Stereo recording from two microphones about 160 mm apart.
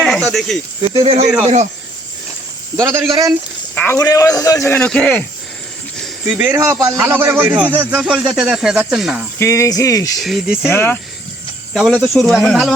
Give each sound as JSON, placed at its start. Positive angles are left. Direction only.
{"t": 0.0, "sound": "speech", "side_deg": 0}
{"t": 0.8, "sound": "speech", "side_deg": -35}
{"t": 2.7, "sound": "speech", "side_deg": -15}
{"t": 3.8, "sound": "a man's voice", "side_deg": 15}
{"t": 4.8, "sound": "speech", "side_deg": 5}
{"t": 6.0, "sound": "speech", "side_deg": -5}
{"t": 9.4, "sound": "a man's voice", "side_deg": 20}
{"t": 10.2, "sound": "speech", "side_deg": 0}
{"t": 10.7, "sound": "speech", "side_deg": 15}
{"t": 11.7, "sound": "speech", "side_deg": 5}